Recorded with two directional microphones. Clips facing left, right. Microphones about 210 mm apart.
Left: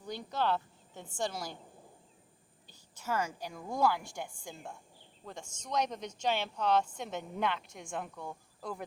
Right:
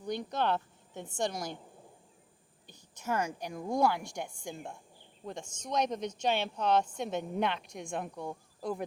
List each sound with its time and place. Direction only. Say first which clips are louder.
0.0 s a woman's voice: right 2 dB; 20° right (ahead or behind)
2.6 s a woman's voice: right 2 dB; 15° right (ahead or behind)